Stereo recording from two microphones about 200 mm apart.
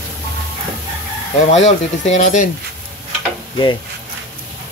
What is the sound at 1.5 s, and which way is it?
Speech, 35° left (ahead or behind).